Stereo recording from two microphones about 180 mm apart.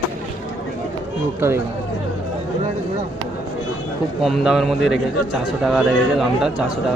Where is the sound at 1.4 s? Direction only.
15° right (ahead or behind).